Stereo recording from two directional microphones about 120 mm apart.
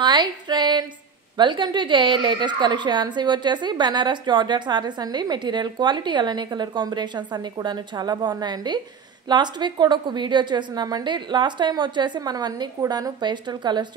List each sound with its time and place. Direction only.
0.0 s speech: 40° right (ahead or behind)